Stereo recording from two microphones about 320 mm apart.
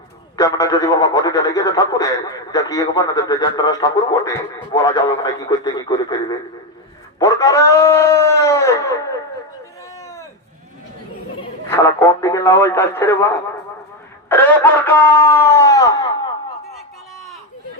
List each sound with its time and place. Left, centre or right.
0.3 s speech: centre
11.7 s speech: centre
14.3 s a sound: centre